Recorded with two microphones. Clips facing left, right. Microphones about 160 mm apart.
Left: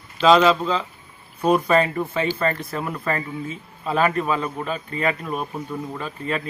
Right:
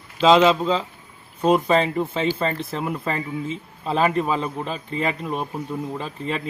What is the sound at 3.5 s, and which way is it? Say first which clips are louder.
Speech: even; 25° right (ahead or behind).